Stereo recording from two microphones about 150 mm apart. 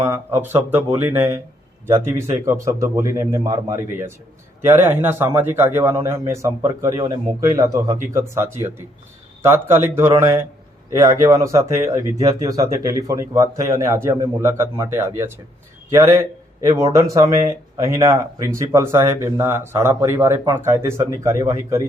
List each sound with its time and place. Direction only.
0.0 s a man's voice: 15° right (ahead or behind)
9.4 s a man's voice: 15° right (ahead or behind)